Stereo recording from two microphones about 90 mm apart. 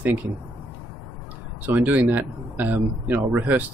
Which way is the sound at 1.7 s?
20° right (ahead or behind).